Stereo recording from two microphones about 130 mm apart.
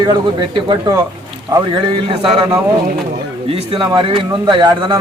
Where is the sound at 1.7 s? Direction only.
45° right (ahead or behind).